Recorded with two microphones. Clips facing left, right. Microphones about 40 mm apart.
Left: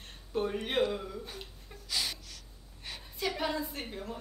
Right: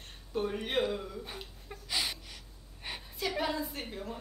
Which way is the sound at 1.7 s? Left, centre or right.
Centre.